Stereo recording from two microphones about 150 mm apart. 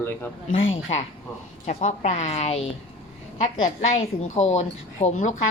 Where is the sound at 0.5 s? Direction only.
40° left (ahead or behind).